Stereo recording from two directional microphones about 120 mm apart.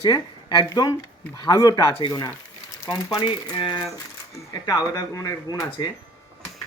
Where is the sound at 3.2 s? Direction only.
45° left (ahead or behind).